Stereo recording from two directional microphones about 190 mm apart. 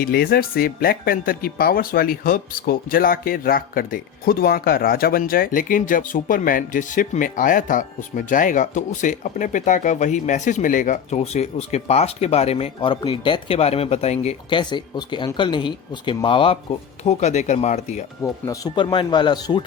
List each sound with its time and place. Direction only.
0.0 s speech: 55° left (ahead or behind); by 14.6 s 35° left (ahead or behind)
14.6 s speech: 25° left (ahead or behind); by 18.0 s 40° left (ahead or behind)
18.2 s speech: 20° left (ahead or behind)